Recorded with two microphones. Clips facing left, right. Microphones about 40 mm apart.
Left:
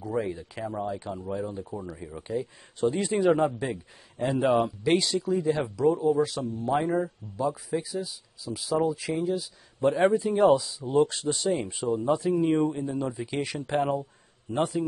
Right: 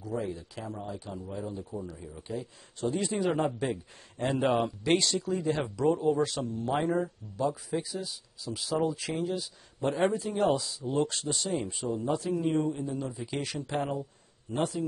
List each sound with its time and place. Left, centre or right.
0.1 s speech: left
0.8 s a man's voice: centre
2.2 s a man's voice: centre
12.5 s speech: left
13.0 s a man's voice: centre
13.6 s speech: left
14.5 s a man's voice: centre